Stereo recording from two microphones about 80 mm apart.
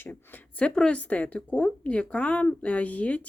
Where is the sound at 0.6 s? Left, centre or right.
Centre.